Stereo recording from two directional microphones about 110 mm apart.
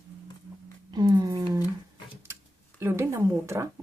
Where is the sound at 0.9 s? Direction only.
35° right (ahead or behind).